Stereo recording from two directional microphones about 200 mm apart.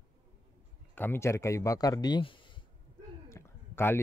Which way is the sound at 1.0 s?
10° left (ahead or behind).